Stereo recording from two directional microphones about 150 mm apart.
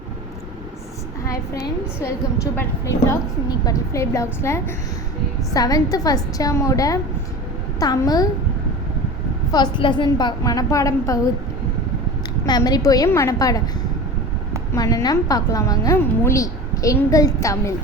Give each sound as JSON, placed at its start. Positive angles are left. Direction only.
{"t": 1.2, "sound": "a woman's voice", "side_deg": 20}
{"t": 3.7, "sound": "a woman's voice", "side_deg": 20}
{"t": 9.5, "sound": "a woman's voice", "side_deg": 30}
{"t": 12.5, "sound": "a woman's voice", "side_deg": 25}
{"t": 14.7, "sound": "a woman's voice", "side_deg": 20}